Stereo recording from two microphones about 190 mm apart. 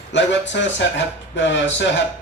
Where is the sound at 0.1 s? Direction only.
70° left (ahead or behind).